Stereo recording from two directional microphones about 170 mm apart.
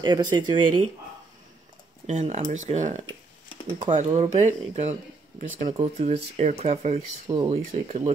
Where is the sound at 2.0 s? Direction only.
45° right (ahead or behind).